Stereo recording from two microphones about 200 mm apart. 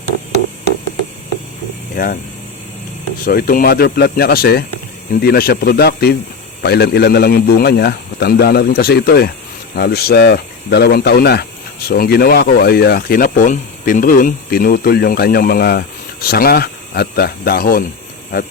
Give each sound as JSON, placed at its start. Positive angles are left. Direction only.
{"t": 2.0, "sound": "speech", "side_deg": 40}
{"t": 3.2, "sound": "speech", "side_deg": 45}